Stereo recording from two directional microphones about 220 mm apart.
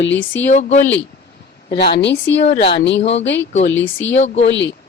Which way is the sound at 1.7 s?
50° left (ahead or behind).